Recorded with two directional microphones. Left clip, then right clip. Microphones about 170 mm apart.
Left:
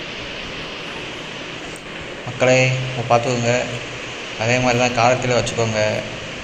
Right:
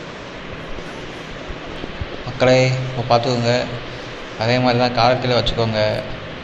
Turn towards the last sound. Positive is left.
turn(degrees=5)  # may be behind; listen again after turning